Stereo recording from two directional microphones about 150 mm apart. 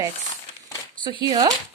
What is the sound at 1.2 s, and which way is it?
Speech, 25° right (ahead or behind).